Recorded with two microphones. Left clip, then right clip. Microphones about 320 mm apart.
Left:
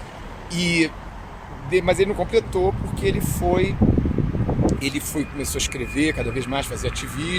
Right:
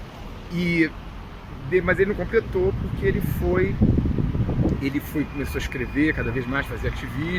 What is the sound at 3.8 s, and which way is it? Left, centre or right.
Mechanical fan, left.